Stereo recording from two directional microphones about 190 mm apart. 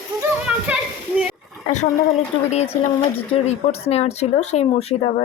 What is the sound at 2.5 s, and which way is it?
Speech, 35° left (ahead or behind).